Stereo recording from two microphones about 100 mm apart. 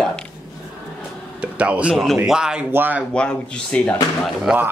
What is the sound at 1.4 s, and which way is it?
Speech, 10° right (ahead or behind).